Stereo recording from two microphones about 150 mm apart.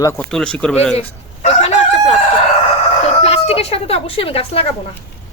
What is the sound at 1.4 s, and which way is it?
Chicken, 45° left (ahead or behind).